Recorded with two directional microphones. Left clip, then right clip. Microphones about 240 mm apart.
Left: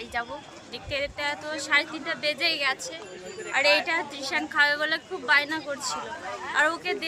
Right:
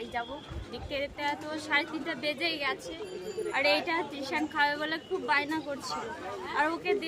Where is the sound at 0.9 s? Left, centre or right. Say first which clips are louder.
Left 4 dB; centre.